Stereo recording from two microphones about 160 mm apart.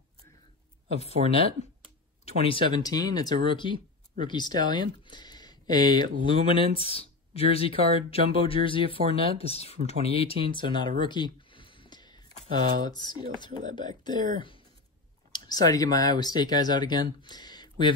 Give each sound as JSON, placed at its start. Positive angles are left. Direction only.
{"t": 1.2, "sound": "speech", "side_deg": -45}
{"t": 2.2, "sound": "speech", "side_deg": 35}
{"t": 15.3, "sound": "speech", "side_deg": 25}